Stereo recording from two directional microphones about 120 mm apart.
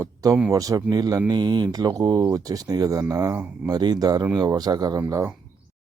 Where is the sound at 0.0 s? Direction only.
30° right (ahead or behind).